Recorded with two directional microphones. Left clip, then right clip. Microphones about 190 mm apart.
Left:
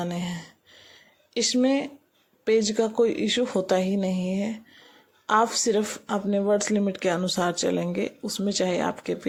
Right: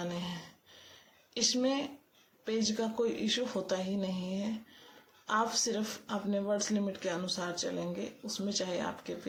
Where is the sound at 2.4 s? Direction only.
40° left (ahead or behind).